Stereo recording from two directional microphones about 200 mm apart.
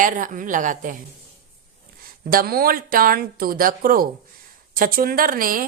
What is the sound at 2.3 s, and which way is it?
A woman's voice, 45° right (ahead or behind).